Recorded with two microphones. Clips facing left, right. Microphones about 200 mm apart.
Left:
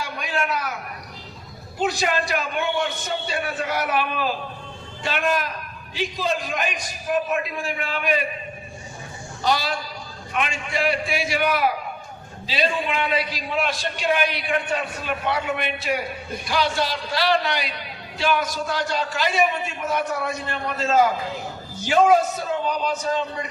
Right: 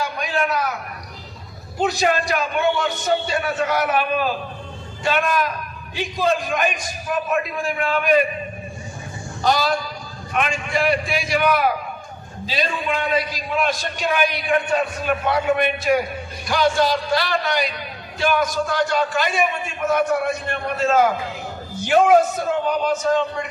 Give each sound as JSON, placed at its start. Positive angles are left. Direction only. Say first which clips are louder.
{"t": 0.0, "sound": "a sound", "louder": "right 4 dB", "side_deg": -45}
{"t": 1.8, "sound": "a man's voice", "louder": "right 3 dB", "side_deg": -45}
{"t": 9.4, "sound": "a man's voice", "louder": "right 4 dB", "side_deg": -45}